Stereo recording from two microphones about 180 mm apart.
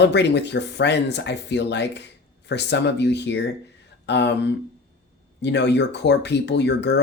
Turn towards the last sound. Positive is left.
turn(degrees=70)  # may be behind; listen again after turning